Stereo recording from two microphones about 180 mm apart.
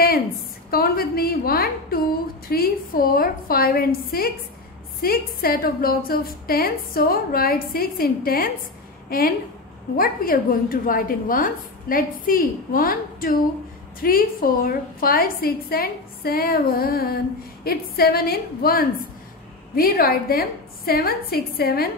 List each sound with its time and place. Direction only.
0.7 s a woman's voice: 55° left (ahead or behind)